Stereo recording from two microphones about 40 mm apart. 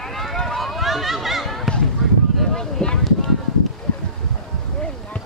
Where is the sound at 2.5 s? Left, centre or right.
Centre.